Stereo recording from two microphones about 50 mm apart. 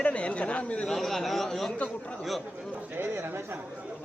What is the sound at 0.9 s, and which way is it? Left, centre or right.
Speech, centre.